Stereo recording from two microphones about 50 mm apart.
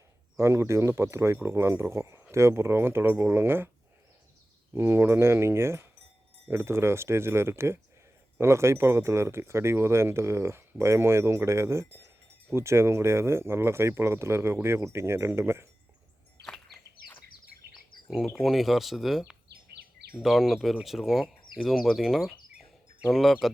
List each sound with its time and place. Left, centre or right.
0.3 s speech: right
4.7 s speech: right
18.3 s speech: centre
20.2 s speech: centre